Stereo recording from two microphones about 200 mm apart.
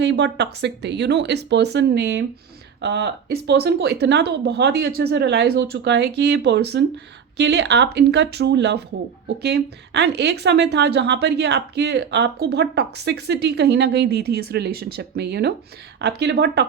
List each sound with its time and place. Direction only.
0.0 s a woman's voice: 60° right (ahead or behind)